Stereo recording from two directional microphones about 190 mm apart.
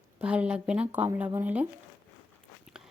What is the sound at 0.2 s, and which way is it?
Speech, 5° right (ahead or behind).